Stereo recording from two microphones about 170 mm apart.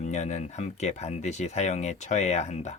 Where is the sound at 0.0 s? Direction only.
45° left (ahead or behind).